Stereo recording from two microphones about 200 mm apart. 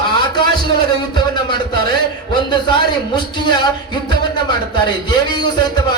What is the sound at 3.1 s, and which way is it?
Speech, 20° left (ahead or behind).